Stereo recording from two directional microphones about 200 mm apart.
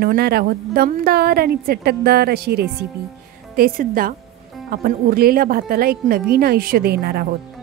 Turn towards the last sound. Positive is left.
turn(degrees=-50)  # may be behind; listen again after turning